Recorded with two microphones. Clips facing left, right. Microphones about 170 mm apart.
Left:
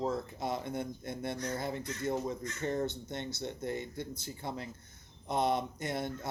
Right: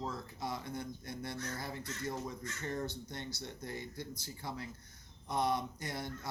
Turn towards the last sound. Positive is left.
turn(degrees=25)  # may be behind; listen again after turning